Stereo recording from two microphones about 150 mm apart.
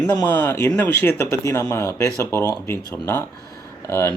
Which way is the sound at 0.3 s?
15° left (ahead or behind).